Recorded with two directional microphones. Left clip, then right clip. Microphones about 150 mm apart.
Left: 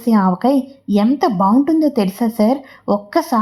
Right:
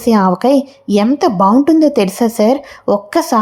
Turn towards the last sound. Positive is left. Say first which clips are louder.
# right 4 dB
turn(degrees=-25)  # may be behind; listen again after turning